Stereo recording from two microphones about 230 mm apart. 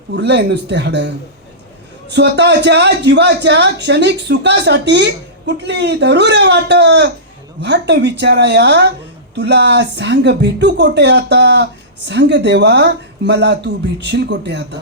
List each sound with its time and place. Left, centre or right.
0.1 s speech: right